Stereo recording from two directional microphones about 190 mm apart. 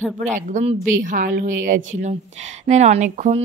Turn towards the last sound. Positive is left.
turn(degrees=-35)  # may be behind; listen again after turning